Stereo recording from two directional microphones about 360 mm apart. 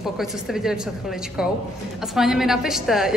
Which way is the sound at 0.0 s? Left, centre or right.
Centre.